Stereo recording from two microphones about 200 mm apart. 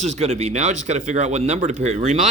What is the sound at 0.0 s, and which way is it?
Speech, 35° right (ahead or behind).